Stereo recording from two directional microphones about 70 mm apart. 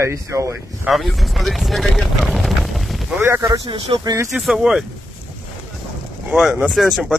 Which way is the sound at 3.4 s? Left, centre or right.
Right.